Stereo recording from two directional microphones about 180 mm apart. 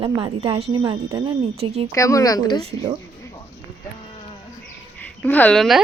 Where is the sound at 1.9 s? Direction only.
15° left (ahead or behind).